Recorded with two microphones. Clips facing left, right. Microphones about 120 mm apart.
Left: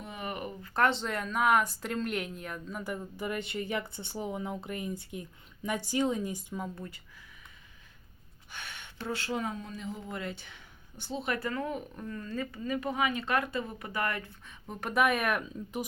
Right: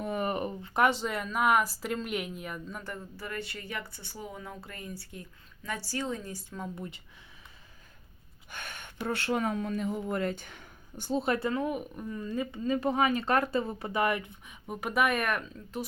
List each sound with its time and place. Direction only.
0.0 s a sound: 45° right (ahead or behind)
0.7 s speech: 10° right (ahead or behind)
2.8 s speech: 15° left (ahead or behind)
6.7 s speech: 20° right (ahead or behind)
8.4 s a sound: 50° right (ahead or behind)
9.0 s speech: 60° right (ahead or behind); by 11.3 s 40° right (ahead or behind)
11.3 s speech: 20° right (ahead or behind)
12.6 s speech: 30° right (ahead or behind); by 15.4 s 5° left (ahead or behind)
15.5 s speech: 15° left (ahead or behind)